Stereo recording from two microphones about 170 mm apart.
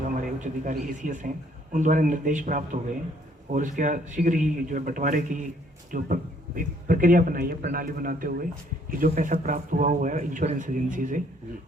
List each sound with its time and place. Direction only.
0.2 s a man's voice: 50° right (ahead or behind)